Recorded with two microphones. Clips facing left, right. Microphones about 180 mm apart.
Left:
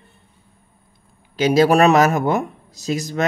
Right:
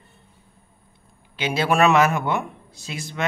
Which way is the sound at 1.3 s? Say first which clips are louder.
Left 7 dB; 40° left (ahead or behind).